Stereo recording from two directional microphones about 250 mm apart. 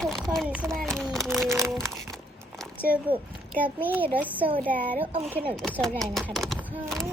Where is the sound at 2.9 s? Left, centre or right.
Centre.